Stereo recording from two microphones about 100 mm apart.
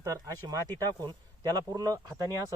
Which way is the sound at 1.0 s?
40° right (ahead or behind).